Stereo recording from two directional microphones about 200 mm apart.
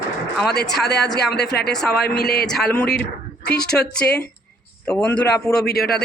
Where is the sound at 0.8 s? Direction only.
55° left (ahead or behind).